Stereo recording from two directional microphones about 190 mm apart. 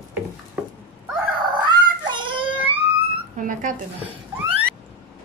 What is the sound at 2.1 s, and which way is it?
Child singing, 25° right (ahead or behind).